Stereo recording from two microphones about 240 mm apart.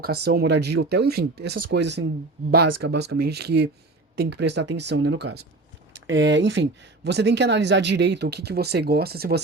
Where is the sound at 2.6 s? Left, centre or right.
Right.